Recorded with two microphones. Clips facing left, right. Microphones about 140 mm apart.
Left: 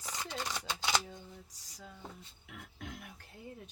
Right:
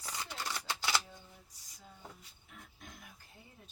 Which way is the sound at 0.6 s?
20° left (ahead or behind).